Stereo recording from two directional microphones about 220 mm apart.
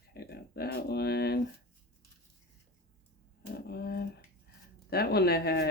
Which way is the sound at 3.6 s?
45° left (ahead or behind).